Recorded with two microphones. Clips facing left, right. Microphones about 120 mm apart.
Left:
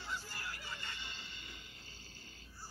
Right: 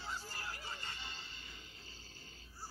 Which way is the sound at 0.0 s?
40° right (ahead or behind).